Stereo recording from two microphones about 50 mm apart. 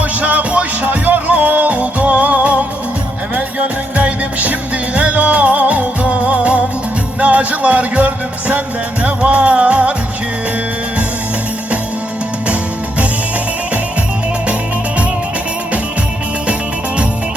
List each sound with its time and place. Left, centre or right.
0.0 s music: right